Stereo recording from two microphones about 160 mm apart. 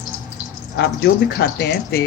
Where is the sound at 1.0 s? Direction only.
85° left.